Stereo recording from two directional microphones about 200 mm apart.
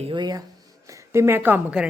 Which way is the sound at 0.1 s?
20° right (ahead or behind).